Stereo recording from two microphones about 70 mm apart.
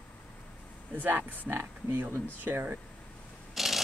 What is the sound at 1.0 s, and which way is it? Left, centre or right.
Speech, right.